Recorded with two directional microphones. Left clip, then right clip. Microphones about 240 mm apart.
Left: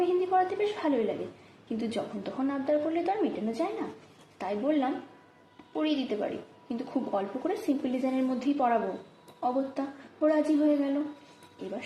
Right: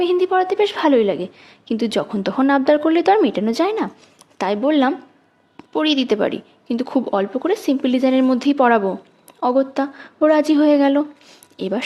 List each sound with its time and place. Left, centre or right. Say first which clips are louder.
0.3 s a woman's voice: right 10 dB; right